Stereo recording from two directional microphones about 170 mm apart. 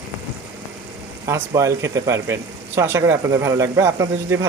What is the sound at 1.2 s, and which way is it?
Speech, 20° right (ahead or behind).